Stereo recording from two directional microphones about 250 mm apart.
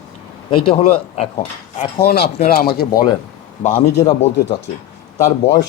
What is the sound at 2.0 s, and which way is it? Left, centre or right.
Speech, left.